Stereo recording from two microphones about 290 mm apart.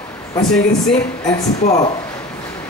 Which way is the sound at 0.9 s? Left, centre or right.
Centre.